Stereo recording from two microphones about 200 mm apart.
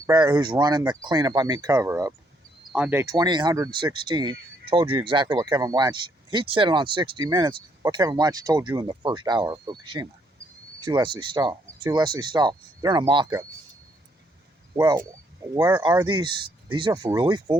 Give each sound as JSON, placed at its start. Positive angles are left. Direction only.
{"t": 0.0, "sound": "speech", "side_deg": -20}
{"t": 14.8, "sound": "speech", "side_deg": -15}